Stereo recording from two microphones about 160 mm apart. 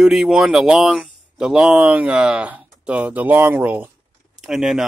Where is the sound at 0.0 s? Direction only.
Centre (ahead or behind).